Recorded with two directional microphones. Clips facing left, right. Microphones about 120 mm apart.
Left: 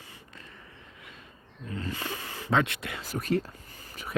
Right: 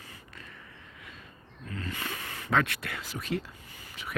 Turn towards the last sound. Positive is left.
turn(degrees=45)  # may be behind; listen again after turning